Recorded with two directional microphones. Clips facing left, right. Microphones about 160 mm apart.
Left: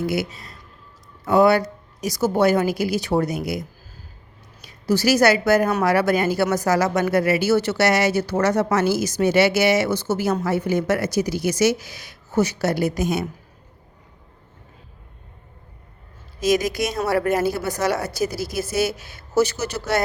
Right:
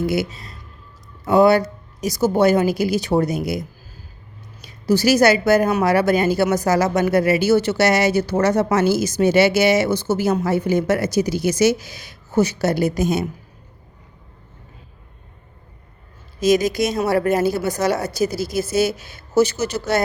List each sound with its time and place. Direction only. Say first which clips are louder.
0.1 s speech: right 3 dB; 25° right (ahead or behind)
4.6 s a woman's voice: right 3 dB; 20° right (ahead or behind)
16.4 s speech: right 3 dB; 25° right (ahead or behind)